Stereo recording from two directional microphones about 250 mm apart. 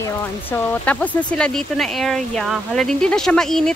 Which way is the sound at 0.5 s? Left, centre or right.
Centre.